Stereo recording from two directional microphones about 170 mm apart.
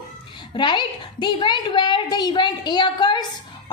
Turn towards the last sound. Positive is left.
turn(degrees=25)  # may be behind; listen again after turning